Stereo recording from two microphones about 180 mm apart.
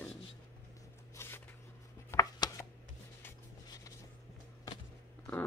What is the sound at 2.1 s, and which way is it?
Chopping, 15° left (ahead or behind).